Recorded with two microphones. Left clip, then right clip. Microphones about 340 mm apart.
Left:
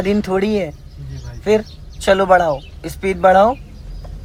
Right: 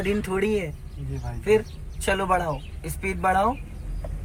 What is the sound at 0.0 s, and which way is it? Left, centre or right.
A man's voice, centre.